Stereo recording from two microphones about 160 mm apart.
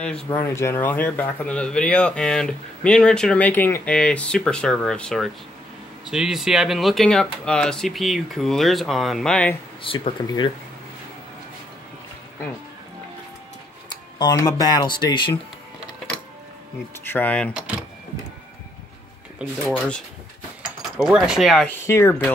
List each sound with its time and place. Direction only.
0.0 s speech: 10° left (ahead or behind)
9.8 s speech: 35° left (ahead or behind)
13.8 s speech: 25° left (ahead or behind)
17.0 s speech: 10° left (ahead or behind)
19.4 s speech: 5° right (ahead or behind)
20.6 s speech: 5° right (ahead or behind)
21.8 s speech: 15° left (ahead or behind)